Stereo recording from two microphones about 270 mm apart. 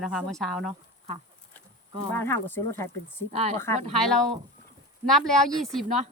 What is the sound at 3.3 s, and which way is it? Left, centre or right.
Speech, right.